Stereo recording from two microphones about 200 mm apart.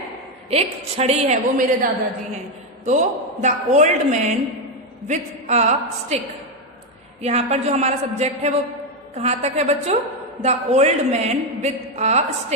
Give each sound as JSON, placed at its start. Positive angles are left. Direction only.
{"t": 0.5, "sound": "a man's voice", "side_deg": -30}
{"t": 7.2, "sound": "a man's voice", "side_deg": -30}